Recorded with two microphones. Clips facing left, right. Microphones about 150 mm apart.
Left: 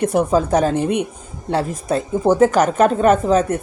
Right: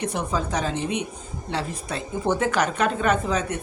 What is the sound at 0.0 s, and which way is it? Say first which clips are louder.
A man's voice: left 10 dB; 50° left (ahead or behind).